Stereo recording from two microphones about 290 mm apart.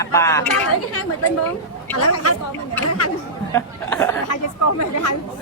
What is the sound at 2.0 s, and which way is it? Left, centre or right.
Speech, left.